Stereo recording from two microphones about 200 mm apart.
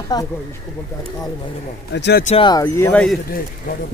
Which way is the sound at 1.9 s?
60° left (ahead or behind).